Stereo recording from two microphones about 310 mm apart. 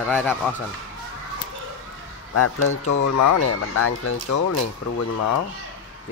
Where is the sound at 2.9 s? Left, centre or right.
Left.